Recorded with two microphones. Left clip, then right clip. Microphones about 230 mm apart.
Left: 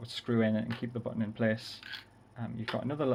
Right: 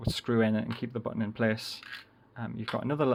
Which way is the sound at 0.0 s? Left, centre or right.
Right.